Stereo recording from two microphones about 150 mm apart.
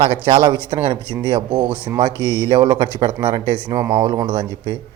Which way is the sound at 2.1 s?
15° left (ahead or behind).